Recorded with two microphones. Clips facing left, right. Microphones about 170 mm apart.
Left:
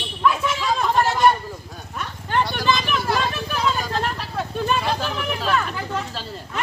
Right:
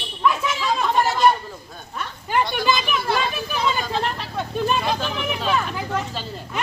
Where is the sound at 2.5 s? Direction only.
10° right (ahead or behind).